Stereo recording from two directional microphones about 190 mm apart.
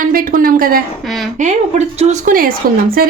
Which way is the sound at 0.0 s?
50° right (ahead or behind).